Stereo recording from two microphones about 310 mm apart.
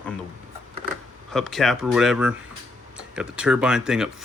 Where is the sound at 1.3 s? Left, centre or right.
Centre.